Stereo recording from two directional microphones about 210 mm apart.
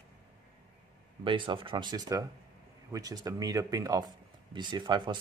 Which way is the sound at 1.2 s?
25° right (ahead or behind).